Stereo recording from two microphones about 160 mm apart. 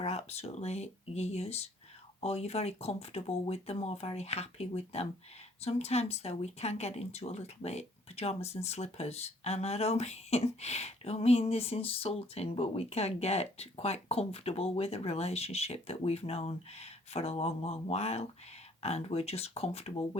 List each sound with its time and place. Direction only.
0.0 s speech: 40° left (ahead or behind)